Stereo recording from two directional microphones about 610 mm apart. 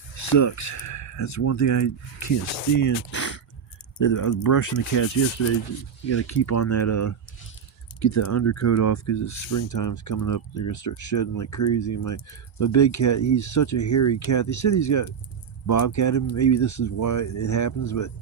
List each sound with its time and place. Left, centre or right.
0.2 s speech: left
2.8 s a sound: left
3.9 s speech: left
6.1 s speech: left